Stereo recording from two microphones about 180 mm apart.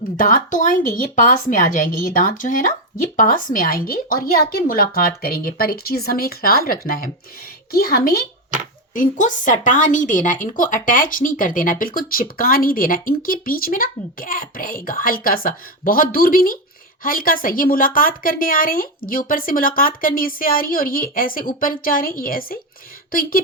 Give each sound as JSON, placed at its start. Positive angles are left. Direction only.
{"t": 0.2, "sound": "a woman's voice", "side_deg": 50}